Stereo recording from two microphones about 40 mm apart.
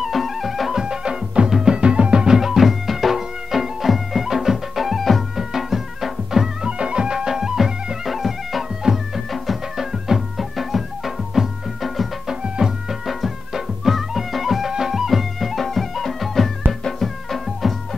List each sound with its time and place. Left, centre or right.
0.0 s music: centre
0.7 s music: right
1.8 s music: right; by 6.7 s centre
6.8 s music: right; by 12.1 s centre
12.3 s music: centre
13.0 s music: centre